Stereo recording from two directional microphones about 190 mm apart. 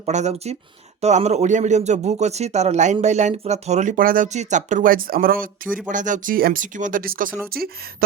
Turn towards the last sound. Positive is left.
turn(degrees=-55)  # may be behind; listen again after turning